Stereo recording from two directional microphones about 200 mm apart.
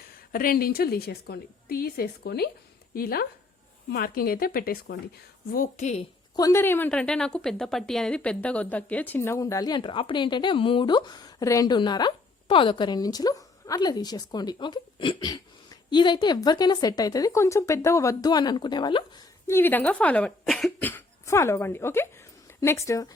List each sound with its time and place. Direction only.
0.3 s a woman's voice: 45° left (ahead or behind)
6.3 s a woman's voice: 15° left (ahead or behind)